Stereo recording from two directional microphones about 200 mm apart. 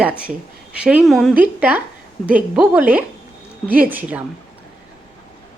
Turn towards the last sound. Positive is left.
turn(degrees=-10)  # may be behind; listen again after turning